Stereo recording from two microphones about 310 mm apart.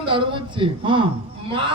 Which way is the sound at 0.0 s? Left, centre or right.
Centre.